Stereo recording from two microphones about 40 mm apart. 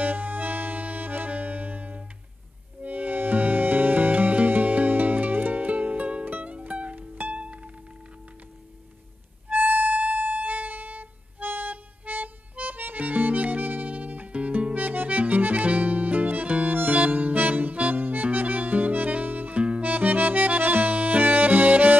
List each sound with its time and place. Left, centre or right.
0.0 s music: right
7.0 s music: right
7.3 s music: right
9.5 s music: right
14.3 s music: right